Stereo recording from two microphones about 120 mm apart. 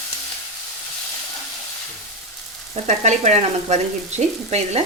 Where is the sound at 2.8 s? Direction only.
75° right (ahead or behind).